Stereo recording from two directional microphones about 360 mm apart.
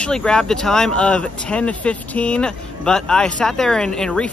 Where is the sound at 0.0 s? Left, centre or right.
Centre.